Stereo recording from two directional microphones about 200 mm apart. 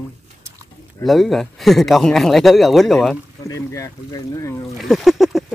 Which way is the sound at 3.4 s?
15° left (ahead or behind).